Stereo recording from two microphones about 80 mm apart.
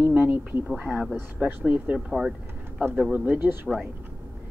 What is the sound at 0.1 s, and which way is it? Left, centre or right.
Speech, right.